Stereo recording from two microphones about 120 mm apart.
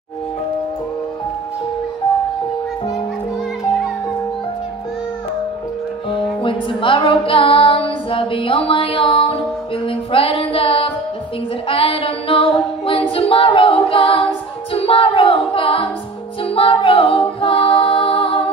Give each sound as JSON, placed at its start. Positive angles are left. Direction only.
{"t": 6.1, "sound": "music", "side_deg": 45}
{"t": 9.1, "sound": "music", "side_deg": 60}
{"t": 9.8, "sound": "music", "side_deg": 50}
{"t": 11.7, "sound": "child singing", "side_deg": 55}
{"t": 16.4, "sound": "music", "side_deg": 50}